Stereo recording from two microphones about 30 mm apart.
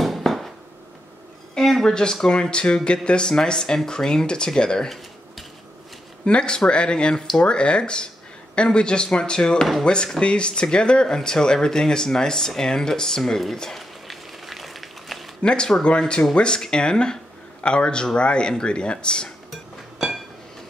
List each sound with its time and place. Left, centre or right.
0.0 s a sound: centre
1.8 s speech: left
6.2 s speech: left; by 13.4 s centre
13.7 s a sound: centre
15.4 s speech: left
19.5 s music: centre